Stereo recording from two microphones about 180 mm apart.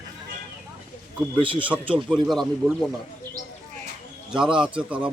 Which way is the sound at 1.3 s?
30° right (ahead or behind).